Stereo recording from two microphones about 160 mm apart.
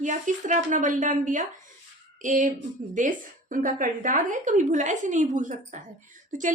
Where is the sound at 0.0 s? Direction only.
50° right (ahead or behind).